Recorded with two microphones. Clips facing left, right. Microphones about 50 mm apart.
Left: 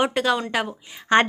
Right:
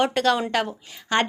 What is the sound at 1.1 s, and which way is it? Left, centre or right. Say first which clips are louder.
Speech: left 5 dB; left.